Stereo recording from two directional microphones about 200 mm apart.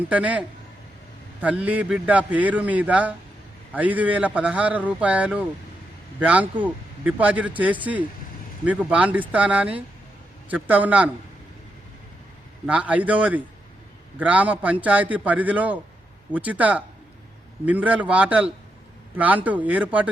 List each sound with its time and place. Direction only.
0.1 s a man's voice: 5° right (ahead or behind)
12.6 s a man's voice: 5° right (ahead or behind)